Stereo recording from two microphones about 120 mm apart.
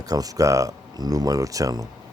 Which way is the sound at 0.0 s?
30° right (ahead or behind).